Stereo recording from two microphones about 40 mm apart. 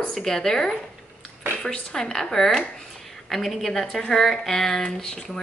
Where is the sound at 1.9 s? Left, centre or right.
Centre.